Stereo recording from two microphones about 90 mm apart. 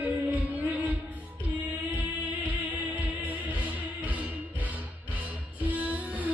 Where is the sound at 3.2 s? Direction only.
15° right (ahead or behind).